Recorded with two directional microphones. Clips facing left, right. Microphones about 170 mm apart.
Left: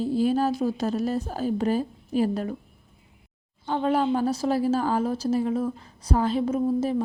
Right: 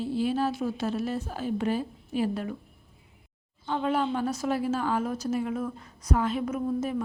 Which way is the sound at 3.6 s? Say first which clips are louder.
Left 4 dB; 35° left (ahead or behind).